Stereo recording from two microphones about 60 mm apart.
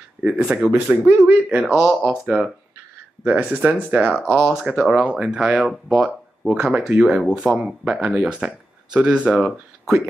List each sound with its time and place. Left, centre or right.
0.2 s speech: centre
0.7 s speech: right
1.7 s speech: centre
2.0 s speech: right
4.4 s speech: centre
7.8 s speech: centre
8.1 s speech: centre